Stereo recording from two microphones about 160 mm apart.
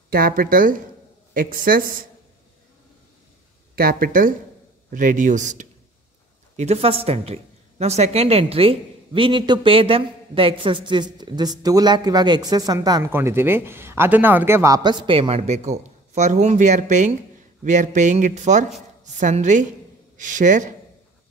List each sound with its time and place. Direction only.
0.1 s a man's voice: 65° right (ahead or behind)
3.7 s a man's voice: 65° right (ahead or behind)